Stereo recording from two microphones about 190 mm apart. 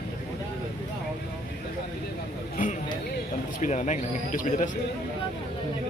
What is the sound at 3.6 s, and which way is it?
Speech, 40° left (ahead or behind).